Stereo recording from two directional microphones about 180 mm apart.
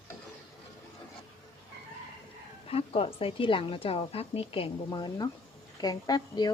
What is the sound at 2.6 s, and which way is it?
A woman's voice, 35° left (ahead or behind).